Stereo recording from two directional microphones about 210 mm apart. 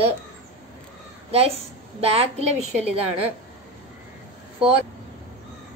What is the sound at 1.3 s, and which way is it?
A woman's voice, 30° right (ahead or behind).